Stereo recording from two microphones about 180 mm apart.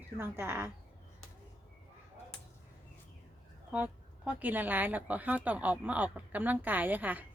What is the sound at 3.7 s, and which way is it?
A woman's voice, 5° right (ahead or behind).